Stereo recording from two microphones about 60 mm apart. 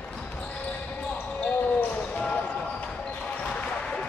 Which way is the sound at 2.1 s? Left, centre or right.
Left.